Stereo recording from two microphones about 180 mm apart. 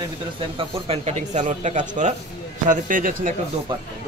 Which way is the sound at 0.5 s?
35° right (ahead or behind).